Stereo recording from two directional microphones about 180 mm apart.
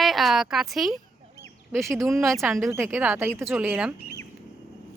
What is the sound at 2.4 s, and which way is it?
Speech, 10° right (ahead or behind).